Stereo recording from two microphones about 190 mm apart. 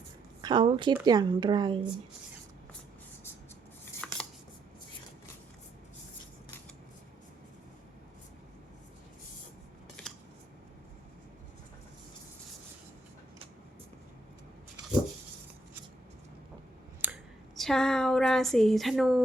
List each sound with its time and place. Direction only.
0.4 s speech: 25° right (ahead or behind)
4.0 s a sound: 5° left (ahead or behind)
17.0 s speech: 5° right (ahead or behind)